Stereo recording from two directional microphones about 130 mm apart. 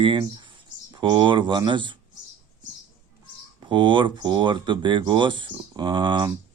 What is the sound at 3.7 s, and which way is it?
Speech, 40° right (ahead or behind).